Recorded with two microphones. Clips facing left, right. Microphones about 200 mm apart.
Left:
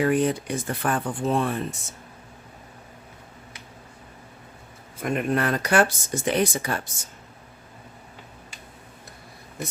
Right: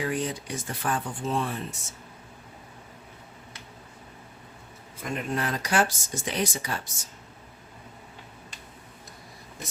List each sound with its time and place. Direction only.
0.0 s speech: 60° left (ahead or behind)
5.0 s speech: 60° left (ahead or behind)